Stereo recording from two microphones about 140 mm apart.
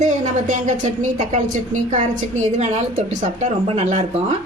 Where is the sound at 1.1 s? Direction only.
60° right (ahead or behind).